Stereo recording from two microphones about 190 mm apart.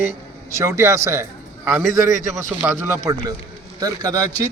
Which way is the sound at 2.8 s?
15° right (ahead or behind).